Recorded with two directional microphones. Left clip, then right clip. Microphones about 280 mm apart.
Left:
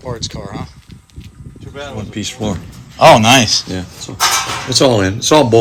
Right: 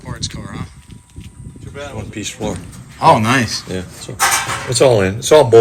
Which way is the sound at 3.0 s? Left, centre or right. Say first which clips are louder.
Left 5 dB; centre.